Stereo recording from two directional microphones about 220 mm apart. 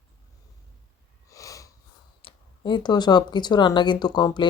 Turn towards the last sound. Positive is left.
turn(degrees=20)  # may be behind; listen again after turning